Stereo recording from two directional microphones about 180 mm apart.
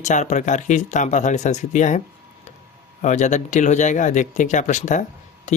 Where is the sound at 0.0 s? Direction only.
40° left (ahead or behind).